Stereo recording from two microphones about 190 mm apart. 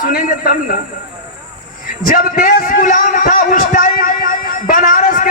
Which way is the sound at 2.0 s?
50° left (ahead or behind).